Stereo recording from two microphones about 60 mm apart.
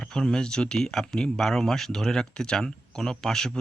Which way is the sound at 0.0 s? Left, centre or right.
Centre.